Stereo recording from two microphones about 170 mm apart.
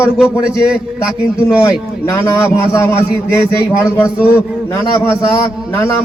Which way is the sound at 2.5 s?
15° left (ahead or behind).